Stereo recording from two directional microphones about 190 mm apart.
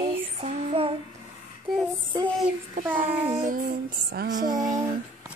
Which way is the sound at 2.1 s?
20° right (ahead or behind).